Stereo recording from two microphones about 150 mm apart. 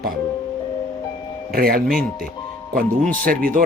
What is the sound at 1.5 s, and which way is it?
Speech, 80° right.